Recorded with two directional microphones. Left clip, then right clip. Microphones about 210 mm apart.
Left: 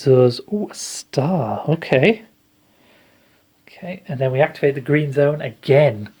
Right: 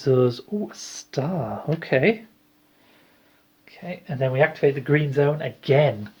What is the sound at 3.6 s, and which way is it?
Speech, 50° left (ahead or behind).